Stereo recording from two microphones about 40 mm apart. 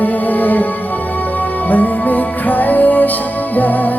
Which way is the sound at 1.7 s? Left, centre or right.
Left.